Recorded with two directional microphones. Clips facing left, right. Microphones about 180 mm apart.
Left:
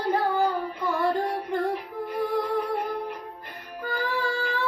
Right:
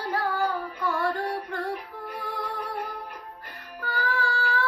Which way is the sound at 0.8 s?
20° left (ahead or behind).